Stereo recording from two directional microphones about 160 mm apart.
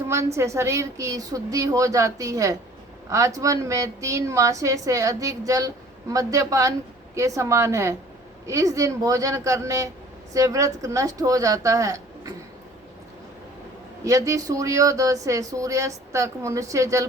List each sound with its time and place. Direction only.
0.3 s a woman's voice: 20° right (ahead or behind)
14.0 s a woman's voice: 20° right (ahead or behind)